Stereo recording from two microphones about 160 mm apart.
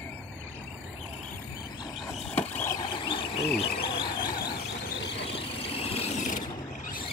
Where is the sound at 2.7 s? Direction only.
25° left (ahead or behind).